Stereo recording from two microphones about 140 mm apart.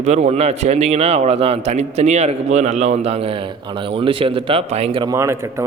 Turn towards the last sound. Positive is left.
turn(degrees=-20)  # may be behind; listen again after turning